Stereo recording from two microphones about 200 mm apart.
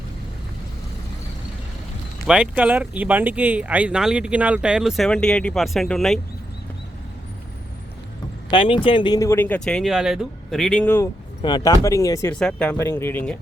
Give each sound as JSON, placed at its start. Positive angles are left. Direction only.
{"t": 2.2, "sound": "speech", "side_deg": -5}
{"t": 8.4, "sound": "speech", "side_deg": 25}
{"t": 12.3, "sound": "speech", "side_deg": 5}